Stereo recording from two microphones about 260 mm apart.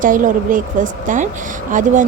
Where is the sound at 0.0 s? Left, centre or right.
Right.